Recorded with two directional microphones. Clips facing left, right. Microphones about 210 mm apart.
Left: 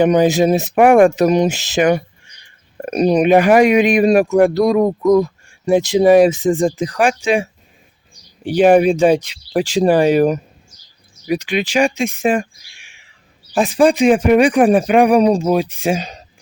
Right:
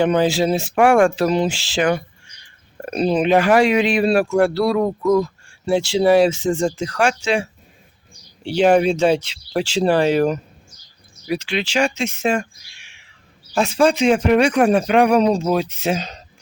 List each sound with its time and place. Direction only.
0.0 s speech: 15° left (ahead or behind)